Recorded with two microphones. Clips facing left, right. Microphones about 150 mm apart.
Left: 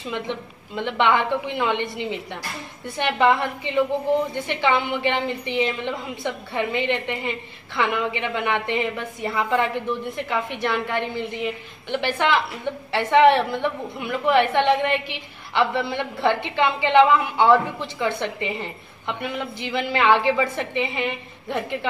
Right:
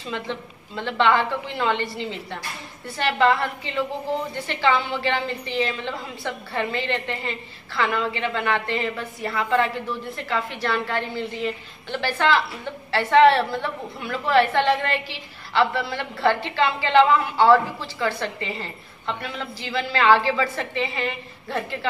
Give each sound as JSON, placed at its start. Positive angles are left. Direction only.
{"t": 0.1, "sound": "a woman's voice", "side_deg": 15}